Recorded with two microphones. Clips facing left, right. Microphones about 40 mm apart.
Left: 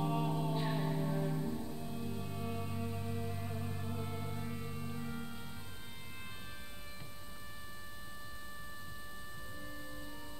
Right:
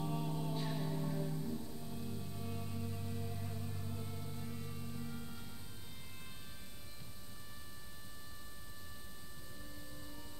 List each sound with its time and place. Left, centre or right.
0.0 s music: left